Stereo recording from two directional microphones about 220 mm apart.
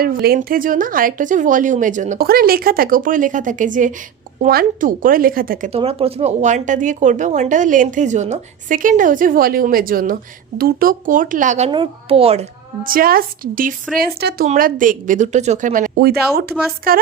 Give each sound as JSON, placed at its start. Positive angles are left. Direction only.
{"t": 0.0, "sound": "speech", "side_deg": -45}
{"t": 5.7, "sound": "speech", "side_deg": -25}
{"t": 12.8, "sound": "a woman's voice", "side_deg": -40}